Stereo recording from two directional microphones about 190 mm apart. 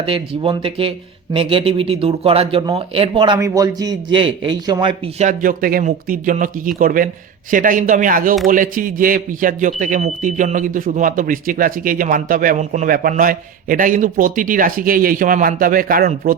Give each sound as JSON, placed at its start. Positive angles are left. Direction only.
{"t": 0.0, "sound": "speech", "side_deg": -30}
{"t": 3.3, "sound": "speech", "side_deg": -15}
{"t": 5.2, "sound": "a man's voice", "side_deg": -45}